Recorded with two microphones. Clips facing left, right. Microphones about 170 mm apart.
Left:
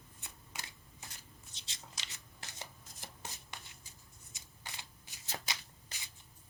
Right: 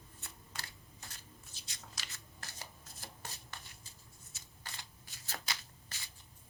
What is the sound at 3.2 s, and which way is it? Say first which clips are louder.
Shuffling cards: left 2 dB; 20° left (ahead or behind).